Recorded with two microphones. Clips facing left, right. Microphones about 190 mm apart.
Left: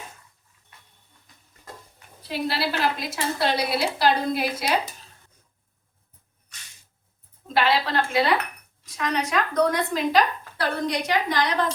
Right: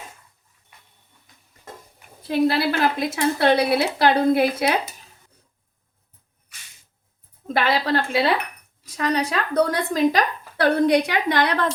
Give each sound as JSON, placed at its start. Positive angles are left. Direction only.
{"t": 2.2, "sound": "a woman's voice", "side_deg": -50}
{"t": 7.4, "sound": "a sound", "side_deg": -45}
{"t": 9.0, "sound": "a woman's voice", "side_deg": -35}